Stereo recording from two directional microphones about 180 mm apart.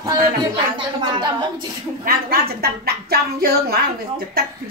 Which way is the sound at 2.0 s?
55° right (ahead or behind).